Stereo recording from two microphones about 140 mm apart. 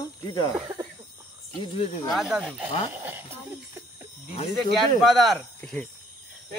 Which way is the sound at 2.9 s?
15° right (ahead or behind).